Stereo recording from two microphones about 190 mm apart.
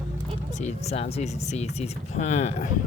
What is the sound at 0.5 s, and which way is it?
Speech, 35° left (ahead or behind).